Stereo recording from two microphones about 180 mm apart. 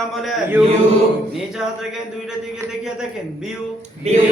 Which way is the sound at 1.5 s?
Centre (ahead or behind).